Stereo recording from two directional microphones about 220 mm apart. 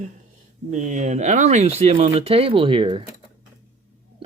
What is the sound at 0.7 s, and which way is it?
Speech, 35° right (ahead or behind).